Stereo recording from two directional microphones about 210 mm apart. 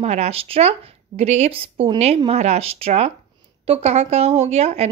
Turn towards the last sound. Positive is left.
turn(degrees=-30)  # may be behind; listen again after turning